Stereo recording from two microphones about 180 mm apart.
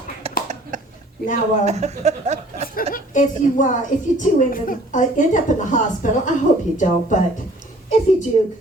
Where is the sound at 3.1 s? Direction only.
45° left (ahead or behind).